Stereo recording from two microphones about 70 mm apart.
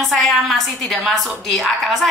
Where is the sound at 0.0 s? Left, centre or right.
Centre.